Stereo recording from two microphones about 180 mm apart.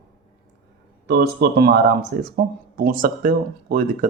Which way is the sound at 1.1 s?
65° right (ahead or behind).